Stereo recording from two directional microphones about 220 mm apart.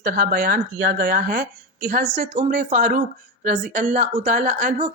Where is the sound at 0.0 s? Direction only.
40° right (ahead or behind).